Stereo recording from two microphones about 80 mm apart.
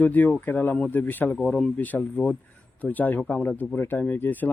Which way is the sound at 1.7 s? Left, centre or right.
Left.